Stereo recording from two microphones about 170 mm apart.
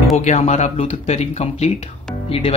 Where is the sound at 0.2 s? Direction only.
40° left (ahead or behind).